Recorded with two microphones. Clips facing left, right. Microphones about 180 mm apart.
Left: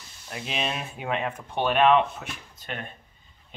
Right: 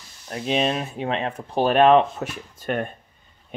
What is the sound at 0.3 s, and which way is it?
Speech, 35° right (ahead or behind).